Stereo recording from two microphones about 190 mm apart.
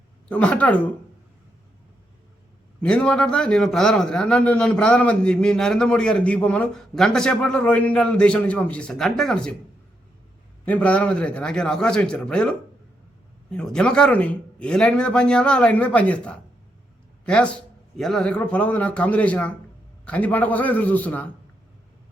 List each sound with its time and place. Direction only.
0.3 s a man's voice: 5° left (ahead or behind)
2.8 s a man's voice: 5° left (ahead or behind)
10.7 s a man's voice: 5° left (ahead or behind)